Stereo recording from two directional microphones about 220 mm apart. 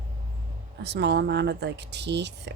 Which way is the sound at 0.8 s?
50° right (ahead or behind).